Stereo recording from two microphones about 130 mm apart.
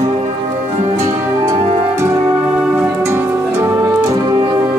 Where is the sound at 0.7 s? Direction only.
60° right (ahead or behind).